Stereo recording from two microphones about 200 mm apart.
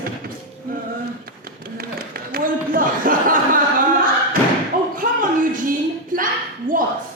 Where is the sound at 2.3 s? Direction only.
45° right (ahead or behind).